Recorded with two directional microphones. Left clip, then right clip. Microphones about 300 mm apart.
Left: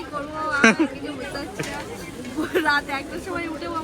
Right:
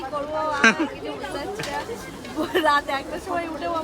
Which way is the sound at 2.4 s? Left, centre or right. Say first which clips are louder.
Right 1 dB; centre.